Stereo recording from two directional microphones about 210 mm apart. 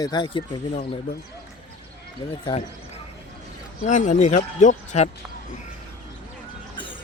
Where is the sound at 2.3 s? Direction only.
25° left (ahead or behind).